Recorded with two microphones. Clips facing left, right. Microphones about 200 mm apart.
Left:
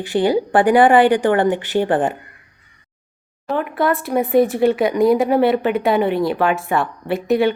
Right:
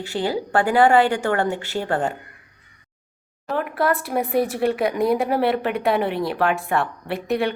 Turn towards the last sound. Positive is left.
turn(degrees=0)  # may be behind; listen again after turning